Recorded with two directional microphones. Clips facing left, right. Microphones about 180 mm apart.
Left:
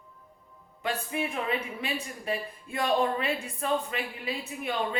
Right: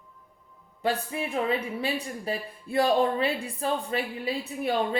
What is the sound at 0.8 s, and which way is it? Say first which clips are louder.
Speech: right 3 dB; 35° right (ahead or behind).